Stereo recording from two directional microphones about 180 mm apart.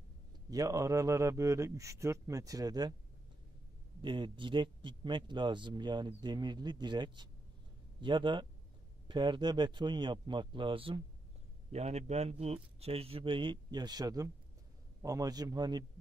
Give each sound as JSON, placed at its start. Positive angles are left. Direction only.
{"t": 0.5, "sound": "a man's voice", "side_deg": -20}
{"t": 4.0, "sound": "a man's voice", "side_deg": -25}